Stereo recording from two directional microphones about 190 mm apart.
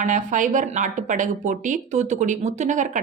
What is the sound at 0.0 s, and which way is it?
Speech, 40° right (ahead or behind).